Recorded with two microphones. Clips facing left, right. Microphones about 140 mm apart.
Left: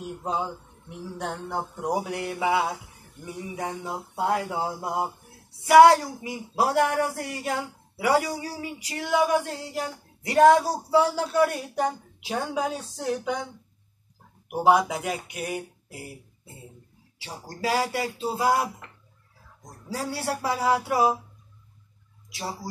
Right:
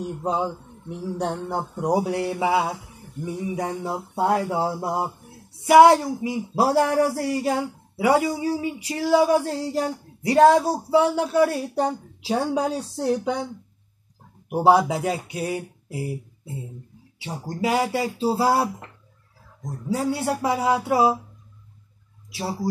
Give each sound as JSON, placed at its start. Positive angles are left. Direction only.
{"t": 0.3, "sound": "speech", "side_deg": -30}
{"t": 14.5, "sound": "speech", "side_deg": -30}
{"t": 17.2, "sound": "speech", "side_deg": -25}
{"t": 19.9, "sound": "speech", "side_deg": -25}
{"t": 22.3, "sound": "speech", "side_deg": -25}